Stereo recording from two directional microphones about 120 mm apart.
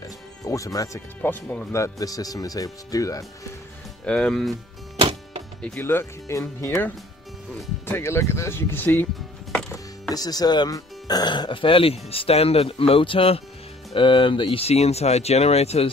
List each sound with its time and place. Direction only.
0.5 s speech: 25° left (ahead or behind)
1.8 s speech: 30° left (ahead or behind)
4.0 s speech: 10° left (ahead or behind)
5.8 s speech: 20° left (ahead or behind)
7.8 s speech: 20° left (ahead or behind)
10.0 s speech: 35° left (ahead or behind); by 15.9 s 60° left (ahead or behind)